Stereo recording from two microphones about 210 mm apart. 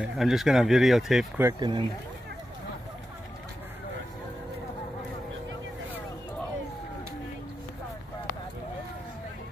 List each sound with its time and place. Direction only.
0.0 s speech: centre (ahead or behind)
1.4 s speech: 20° right (ahead or behind)